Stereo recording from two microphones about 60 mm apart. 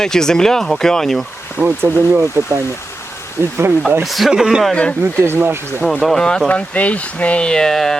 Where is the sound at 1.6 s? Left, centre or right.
Right.